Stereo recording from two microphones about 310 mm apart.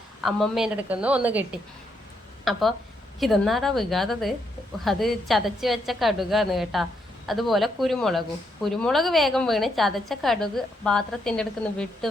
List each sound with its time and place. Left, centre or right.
0.2 s a woman's voice: centre